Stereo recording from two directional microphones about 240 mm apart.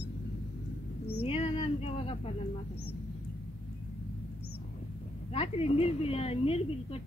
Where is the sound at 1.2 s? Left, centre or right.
Left.